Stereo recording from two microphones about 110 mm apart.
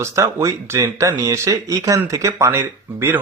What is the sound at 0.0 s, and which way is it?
Speech, 25° right (ahead or behind).